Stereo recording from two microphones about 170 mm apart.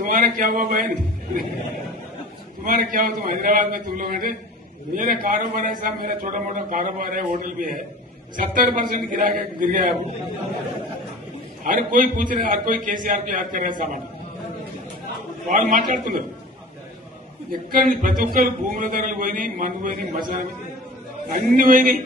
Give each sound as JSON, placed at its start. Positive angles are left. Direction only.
{"t": 0.0, "sound": "a man's voice", "side_deg": -50}
{"t": 2.6, "sound": "a man's voice", "side_deg": -50}
{"t": 11.6, "sound": "a man's voice", "side_deg": -55}
{"t": 15.4, "sound": "a man's voice", "side_deg": -50}
{"t": 17.5, "sound": "speech", "side_deg": -55}